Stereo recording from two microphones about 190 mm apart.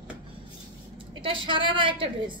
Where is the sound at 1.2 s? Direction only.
25° right (ahead or behind).